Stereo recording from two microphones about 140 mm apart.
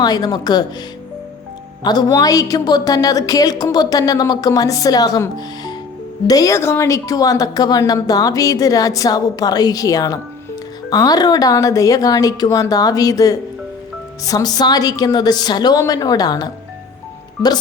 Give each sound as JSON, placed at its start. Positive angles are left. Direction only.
{"t": 0.0, "sound": "a woman's voice", "side_deg": 30}
{"t": 1.8, "sound": "a woman's voice", "side_deg": 30}